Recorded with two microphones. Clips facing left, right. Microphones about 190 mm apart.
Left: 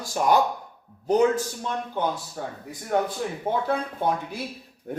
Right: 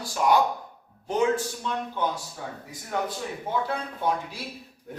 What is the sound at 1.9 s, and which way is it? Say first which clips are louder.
Speech: left 2 dB; 50° left (ahead or behind).